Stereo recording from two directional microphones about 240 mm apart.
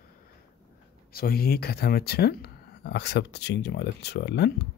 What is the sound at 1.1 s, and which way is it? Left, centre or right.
Speech, left.